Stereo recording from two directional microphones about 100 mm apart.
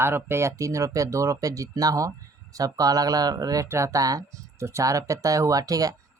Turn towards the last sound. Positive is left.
turn(degrees=-35)  # may be behind; listen again after turning